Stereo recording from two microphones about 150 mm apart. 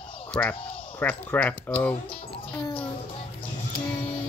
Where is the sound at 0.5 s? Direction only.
35° left (ahead or behind).